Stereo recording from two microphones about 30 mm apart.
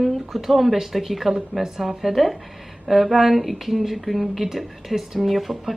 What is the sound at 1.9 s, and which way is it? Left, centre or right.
Speech, centre.